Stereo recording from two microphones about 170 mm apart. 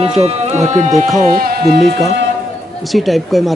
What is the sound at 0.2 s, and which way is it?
Speech, 40° right (ahead or behind).